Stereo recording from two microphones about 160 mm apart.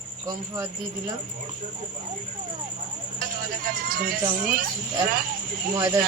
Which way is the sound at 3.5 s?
65° right (ahead or behind).